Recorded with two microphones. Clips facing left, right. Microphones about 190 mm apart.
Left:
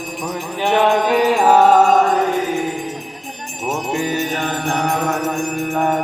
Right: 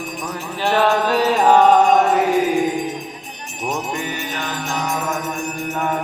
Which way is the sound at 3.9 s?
35° left (ahead or behind).